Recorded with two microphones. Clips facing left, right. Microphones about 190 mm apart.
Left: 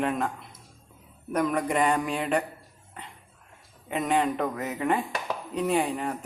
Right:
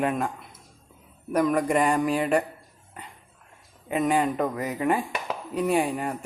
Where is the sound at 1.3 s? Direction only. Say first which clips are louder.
Right 3 dB; 5° right (ahead or behind).